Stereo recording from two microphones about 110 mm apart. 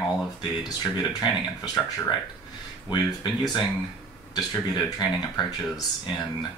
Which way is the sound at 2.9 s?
40° left (ahead or behind).